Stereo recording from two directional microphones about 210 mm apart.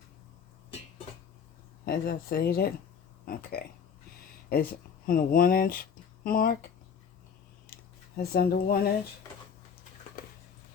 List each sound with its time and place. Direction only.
1.8 s speech: 45° left (ahead or behind)
4.4 s speech: 45° left (ahead or behind)
8.1 s speech: 45° left (ahead or behind)
10.2 s a sound: 45° left (ahead or behind)